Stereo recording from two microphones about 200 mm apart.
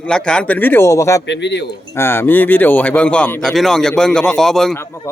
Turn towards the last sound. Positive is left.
turn(degrees=0)  # may be behind; listen again after turning